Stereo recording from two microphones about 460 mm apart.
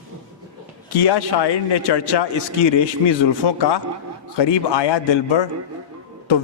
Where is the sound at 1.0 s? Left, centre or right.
Left.